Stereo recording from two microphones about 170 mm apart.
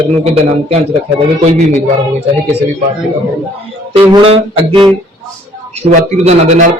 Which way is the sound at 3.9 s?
35° right (ahead or behind).